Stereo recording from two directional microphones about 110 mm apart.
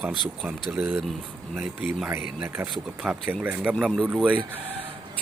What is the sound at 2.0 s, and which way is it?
Speech, 20° right (ahead or behind).